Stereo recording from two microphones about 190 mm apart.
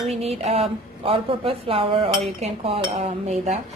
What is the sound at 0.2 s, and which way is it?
Speech, 30° right (ahead or behind).